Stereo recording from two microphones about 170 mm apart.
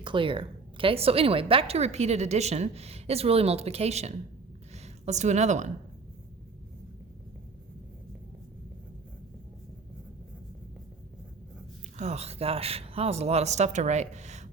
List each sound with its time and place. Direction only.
0.0 s a woman's voice: 30° right (ahead or behind)
11.9 s speech: 40° right (ahead or behind)